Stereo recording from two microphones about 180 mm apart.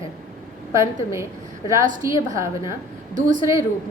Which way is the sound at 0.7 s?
15° right (ahead or behind).